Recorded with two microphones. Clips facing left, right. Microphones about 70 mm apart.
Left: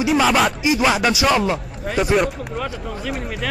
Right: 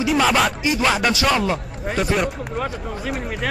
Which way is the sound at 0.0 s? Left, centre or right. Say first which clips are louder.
Left 1 dB; centre.